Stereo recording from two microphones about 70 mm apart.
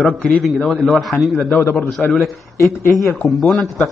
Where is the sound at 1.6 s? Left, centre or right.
Left.